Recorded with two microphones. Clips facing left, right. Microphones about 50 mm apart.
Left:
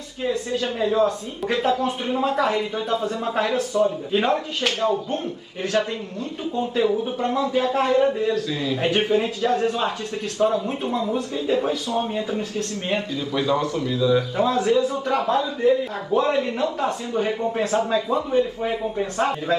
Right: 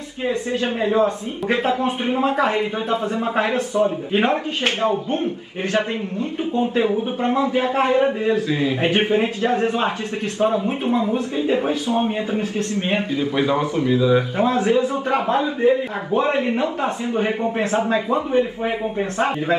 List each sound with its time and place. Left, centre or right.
0.2 s speech: right